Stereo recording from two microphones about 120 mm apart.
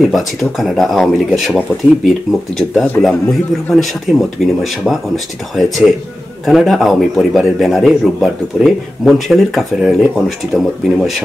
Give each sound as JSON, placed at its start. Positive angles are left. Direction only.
{"t": 0.1, "sound": "a man's voice", "side_deg": 0}